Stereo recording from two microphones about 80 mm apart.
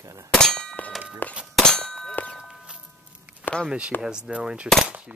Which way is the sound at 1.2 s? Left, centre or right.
Left.